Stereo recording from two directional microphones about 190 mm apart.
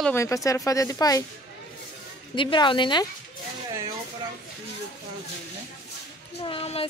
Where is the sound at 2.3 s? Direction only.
25° left (ahead or behind).